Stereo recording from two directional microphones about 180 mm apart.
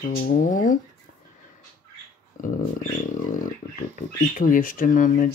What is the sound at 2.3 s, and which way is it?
Speech, 45° left (ahead or behind).